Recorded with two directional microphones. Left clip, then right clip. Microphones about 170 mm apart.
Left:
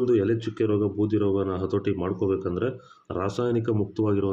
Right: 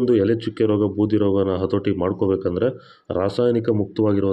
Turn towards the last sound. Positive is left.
turn(degrees=-25)  # may be behind; listen again after turning